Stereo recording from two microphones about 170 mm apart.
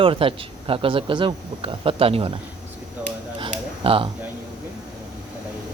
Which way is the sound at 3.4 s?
30° right (ahead or behind).